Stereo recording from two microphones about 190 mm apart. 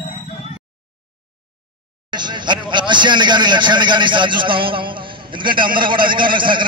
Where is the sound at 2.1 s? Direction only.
25° right (ahead or behind).